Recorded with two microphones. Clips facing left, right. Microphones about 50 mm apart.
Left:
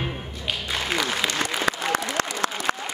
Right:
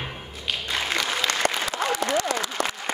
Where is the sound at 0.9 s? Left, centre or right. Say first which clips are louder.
Left 2 dB; centre.